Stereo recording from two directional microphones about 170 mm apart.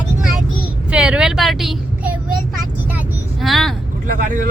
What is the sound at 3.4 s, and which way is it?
Vehicle, centre (ahead or behind).